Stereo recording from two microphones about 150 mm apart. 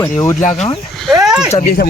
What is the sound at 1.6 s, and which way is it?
Speech, 90° left.